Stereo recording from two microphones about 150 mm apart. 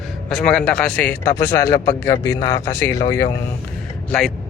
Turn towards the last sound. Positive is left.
turn(degrees=0)  # may be behind; listen again after turning